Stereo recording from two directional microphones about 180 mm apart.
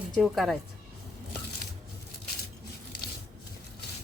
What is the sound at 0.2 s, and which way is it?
Speech, centre (ahead or behind).